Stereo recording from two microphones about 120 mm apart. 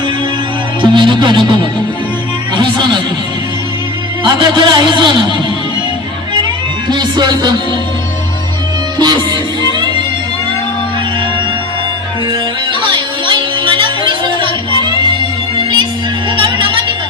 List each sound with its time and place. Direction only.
0.8 s speech: 40° right (ahead or behind)
2.6 s a man's voice: 40° right (ahead or behind)
4.2 s a man's voice: 45° right (ahead or behind)
6.8 s a man's voice: 40° right (ahead or behind)
9.0 s music: 35° right (ahead or behind)
12.9 s music: 40° right (ahead or behind)